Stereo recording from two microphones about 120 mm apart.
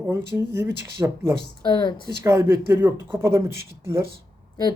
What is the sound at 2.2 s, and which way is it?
Speech, 20° right (ahead or behind).